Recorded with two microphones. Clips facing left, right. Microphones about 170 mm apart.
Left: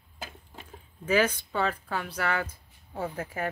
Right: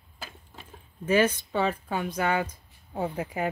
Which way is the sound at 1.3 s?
10° right (ahead or behind).